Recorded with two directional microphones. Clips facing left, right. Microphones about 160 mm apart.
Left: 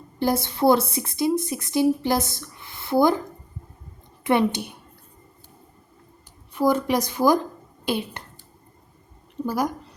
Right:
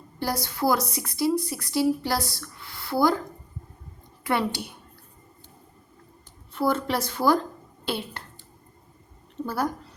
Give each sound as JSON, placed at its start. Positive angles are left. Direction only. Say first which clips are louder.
{"t": 0.2, "sound": "a woman's voice", "louder": "left 5 dB", "side_deg": 20}
{"t": 4.2, "sound": "speech", "louder": "left 5 dB", "side_deg": 20}
{"t": 6.5, "sound": "a woman's voice", "louder": "left 4 dB", "side_deg": 15}